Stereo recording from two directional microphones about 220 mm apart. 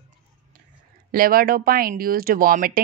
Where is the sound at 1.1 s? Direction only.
40° right (ahead or behind).